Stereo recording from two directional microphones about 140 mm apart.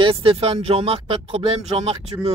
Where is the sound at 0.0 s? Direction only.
40° right (ahead or behind).